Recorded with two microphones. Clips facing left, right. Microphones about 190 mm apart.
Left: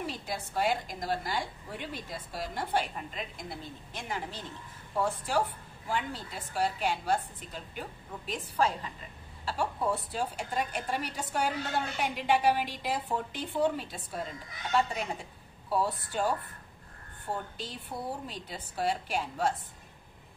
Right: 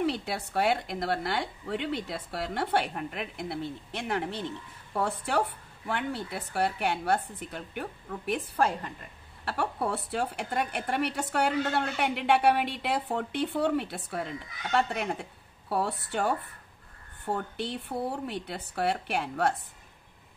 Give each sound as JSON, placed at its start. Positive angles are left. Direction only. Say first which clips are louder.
{"t": 0.0, "sound": "a woman's voice", "louder": "right 7 dB", "side_deg": -70}